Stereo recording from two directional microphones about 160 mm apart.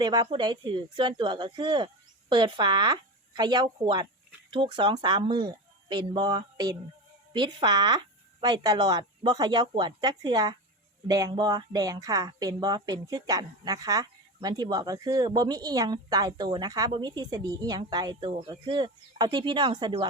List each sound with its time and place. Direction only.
0.0 s speech: 25° right (ahead or behind)